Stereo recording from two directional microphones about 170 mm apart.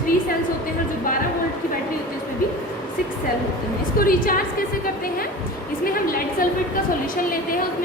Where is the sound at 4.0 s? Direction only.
55° left (ahead or behind).